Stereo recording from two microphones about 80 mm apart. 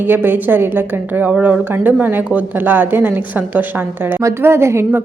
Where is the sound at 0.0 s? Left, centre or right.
Right.